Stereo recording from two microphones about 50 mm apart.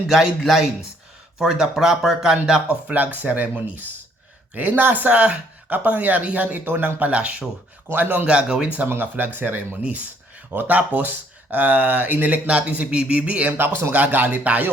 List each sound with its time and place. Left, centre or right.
0.1 s speech: centre
2.6 s speech: right
7.1 s speech: right
7.9 s speech: right
8.3 s speech: centre
8.9 s speech: right